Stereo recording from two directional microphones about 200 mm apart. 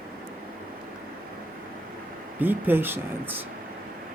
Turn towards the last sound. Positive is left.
turn(degrees=-10)  # may be behind; listen again after turning